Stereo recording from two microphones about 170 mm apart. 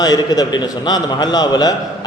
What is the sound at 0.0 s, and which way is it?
A man's voice, 25° left (ahead or behind).